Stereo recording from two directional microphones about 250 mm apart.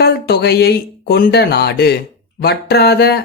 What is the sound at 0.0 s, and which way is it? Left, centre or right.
Speech, left.